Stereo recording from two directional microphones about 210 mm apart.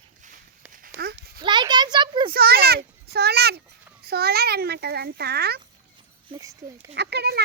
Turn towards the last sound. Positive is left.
turn(degrees=-50)  # may be behind; listen again after turning